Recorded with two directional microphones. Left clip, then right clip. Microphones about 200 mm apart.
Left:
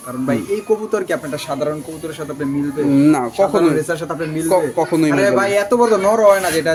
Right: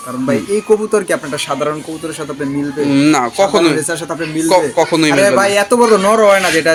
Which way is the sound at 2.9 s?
5° left (ahead or behind).